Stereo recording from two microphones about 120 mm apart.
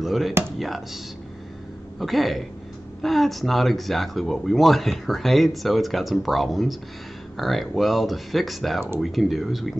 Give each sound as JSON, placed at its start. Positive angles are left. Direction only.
{"t": 0.0, "sound": "speech", "side_deg": 0}
{"t": 2.0, "sound": "speech", "side_deg": 0}